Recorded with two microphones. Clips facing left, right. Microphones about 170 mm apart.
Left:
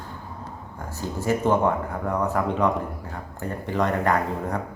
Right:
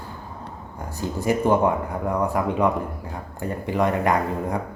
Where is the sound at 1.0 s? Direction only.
15° right (ahead or behind).